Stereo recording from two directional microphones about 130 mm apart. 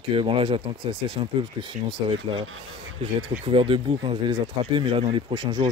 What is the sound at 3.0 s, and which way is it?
Speech, 45° right (ahead or behind).